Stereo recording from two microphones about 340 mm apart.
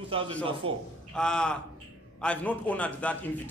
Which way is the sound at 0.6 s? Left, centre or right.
Right.